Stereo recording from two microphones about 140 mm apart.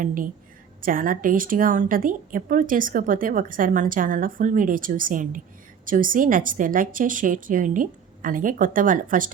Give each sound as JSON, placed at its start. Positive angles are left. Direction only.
{"t": 0.0, "sound": "a woman's voice", "side_deg": -75}